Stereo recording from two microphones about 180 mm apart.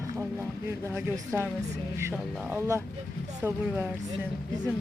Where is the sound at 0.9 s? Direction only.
10° right (ahead or behind).